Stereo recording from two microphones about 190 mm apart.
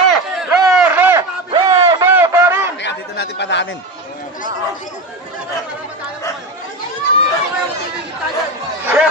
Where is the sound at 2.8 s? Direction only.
65° left (ahead or behind).